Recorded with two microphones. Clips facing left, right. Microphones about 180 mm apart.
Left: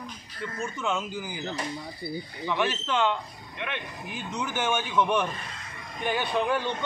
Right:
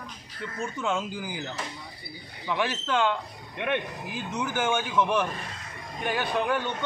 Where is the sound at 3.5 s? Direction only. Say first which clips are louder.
Right 7 dB; 50° right (ahead or behind).